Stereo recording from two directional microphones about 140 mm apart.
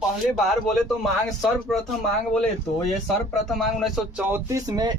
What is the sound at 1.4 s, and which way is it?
Speech, centre (ahead or behind).